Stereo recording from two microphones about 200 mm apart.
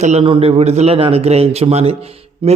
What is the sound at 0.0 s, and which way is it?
A man's voice, 35° right (ahead or behind).